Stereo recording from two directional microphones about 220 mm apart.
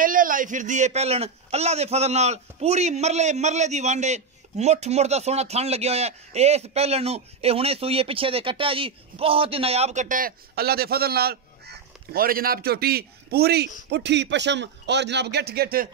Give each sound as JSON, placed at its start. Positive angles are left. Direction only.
{"t": 0.0, "sound": "a man's voice", "side_deg": -40}